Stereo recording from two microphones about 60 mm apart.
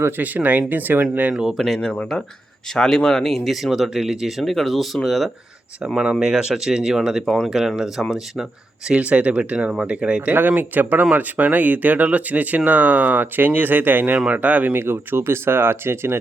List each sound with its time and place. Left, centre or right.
0.2 s speech: right
1.3 s speech: centre
1.5 s speech: centre
6.0 s speech: centre
8.9 s speech: centre
10.3 s speech: right